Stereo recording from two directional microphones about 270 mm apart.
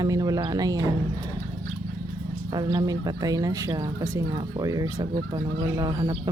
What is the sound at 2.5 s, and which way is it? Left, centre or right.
Speech, centre.